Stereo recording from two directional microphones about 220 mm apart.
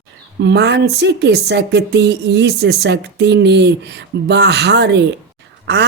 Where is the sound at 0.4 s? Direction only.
50° right (ahead or behind).